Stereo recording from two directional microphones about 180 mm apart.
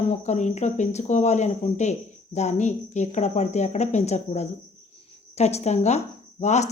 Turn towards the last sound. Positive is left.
turn(degrees=40)  # may be behind; listen again after turning